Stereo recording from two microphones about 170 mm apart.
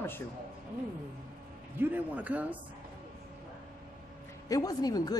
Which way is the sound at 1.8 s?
10° right (ahead or behind).